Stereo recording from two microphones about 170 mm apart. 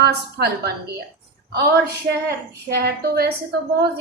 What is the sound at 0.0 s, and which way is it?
A woman's voice, 70° right (ahead or behind).